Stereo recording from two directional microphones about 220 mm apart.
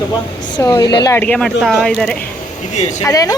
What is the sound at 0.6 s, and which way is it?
Speech, 20° left (ahead or behind).